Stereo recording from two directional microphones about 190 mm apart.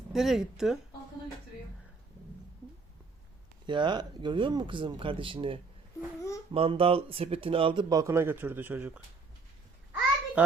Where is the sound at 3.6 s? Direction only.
25° right (ahead or behind); by 9.0 s 10° right (ahead or behind).